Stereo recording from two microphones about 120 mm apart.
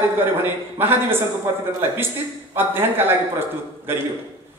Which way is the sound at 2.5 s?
20° right (ahead or behind).